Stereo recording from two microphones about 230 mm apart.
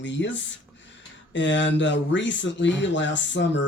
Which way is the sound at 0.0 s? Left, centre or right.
Left.